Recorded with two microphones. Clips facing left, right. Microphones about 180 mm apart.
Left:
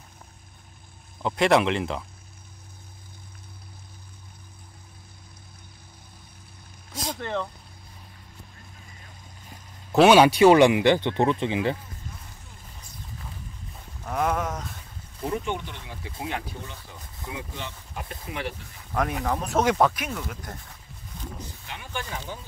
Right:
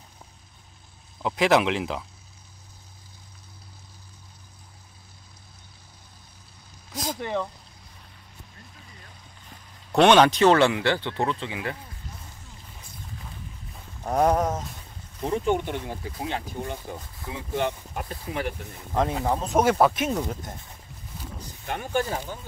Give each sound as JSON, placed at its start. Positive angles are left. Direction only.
{"t": 1.2, "sound": "speech", "side_deg": 0}
{"t": 6.9, "sound": "a sound", "side_deg": 0}
{"t": 7.2, "sound": "vehicle", "side_deg": -15}
{"t": 9.5, "sound": "speech", "side_deg": 5}
{"t": 14.0, "sound": "a sound", "side_deg": -35}
{"t": 15.2, "sound": "speech", "side_deg": -40}
{"t": 16.2, "sound": "speech", "side_deg": -30}
{"t": 16.4, "sound": "speech", "side_deg": -50}
{"t": 17.6, "sound": "a sound", "side_deg": -55}
{"t": 18.0, "sound": "speech", "side_deg": -35}
{"t": 18.9, "sound": "speech", "side_deg": -25}
{"t": 19.6, "sound": "speech", "side_deg": -10}
{"t": 19.9, "sound": "speech", "side_deg": -25}
{"t": 21.6, "sound": "speech", "side_deg": -45}